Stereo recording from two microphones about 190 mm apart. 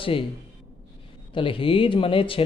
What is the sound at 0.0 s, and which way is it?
Speech, 30° left (ahead or behind).